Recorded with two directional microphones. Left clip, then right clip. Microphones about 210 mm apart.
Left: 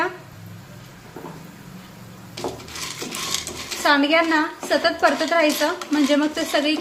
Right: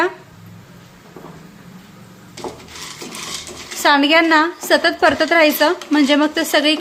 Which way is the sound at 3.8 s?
40° right (ahead or behind).